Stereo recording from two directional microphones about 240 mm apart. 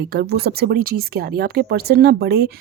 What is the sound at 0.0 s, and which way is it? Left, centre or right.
A woman's voice, right.